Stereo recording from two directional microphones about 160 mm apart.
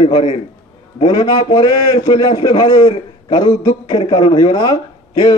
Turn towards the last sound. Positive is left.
turn(degrees=25)  # may be behind; listen again after turning